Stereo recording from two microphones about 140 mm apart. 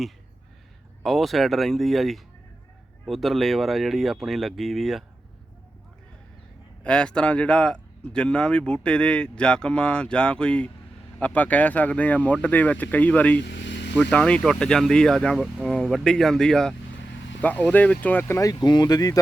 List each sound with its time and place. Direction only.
1.0 s speech: centre (ahead or behind)
6.8 s speech: 5° left (ahead or behind); by 19.2 s 25° left (ahead or behind)